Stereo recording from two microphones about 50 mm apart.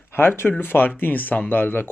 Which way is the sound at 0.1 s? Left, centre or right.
Left.